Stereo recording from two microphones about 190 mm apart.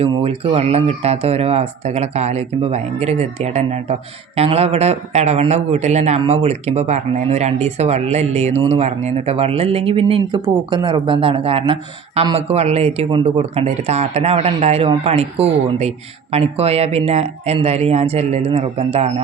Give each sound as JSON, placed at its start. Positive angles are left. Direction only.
{"t": 0.0, "sound": "speech", "side_deg": -30}